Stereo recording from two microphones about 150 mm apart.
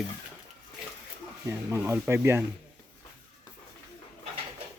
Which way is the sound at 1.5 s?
15° right (ahead or behind).